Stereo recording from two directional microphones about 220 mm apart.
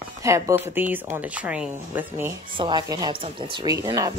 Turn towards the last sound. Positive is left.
turn(degrees=-15)  # may be behind; listen again after turning